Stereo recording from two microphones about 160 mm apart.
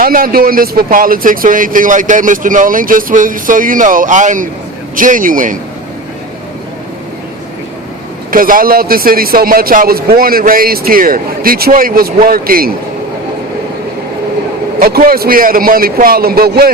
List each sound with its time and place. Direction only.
0.0 s speech: 65° right (ahead or behind)
8.3 s speech: 60° right (ahead or behind)
14.8 s a man's voice: 70° right (ahead or behind)